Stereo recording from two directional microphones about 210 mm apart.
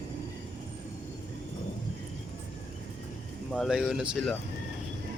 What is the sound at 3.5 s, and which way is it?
Speech, centre (ahead or behind).